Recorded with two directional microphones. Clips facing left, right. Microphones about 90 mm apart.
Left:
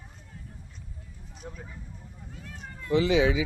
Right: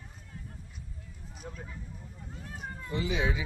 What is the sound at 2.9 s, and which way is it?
Speech, 90° left.